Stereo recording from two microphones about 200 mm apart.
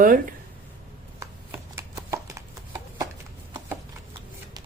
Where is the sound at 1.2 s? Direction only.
15° right (ahead or behind).